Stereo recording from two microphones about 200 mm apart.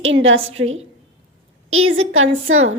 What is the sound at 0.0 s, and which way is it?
Speech, 70° right (ahead or behind).